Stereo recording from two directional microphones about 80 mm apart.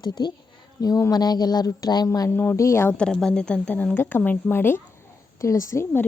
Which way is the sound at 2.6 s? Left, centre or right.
Left.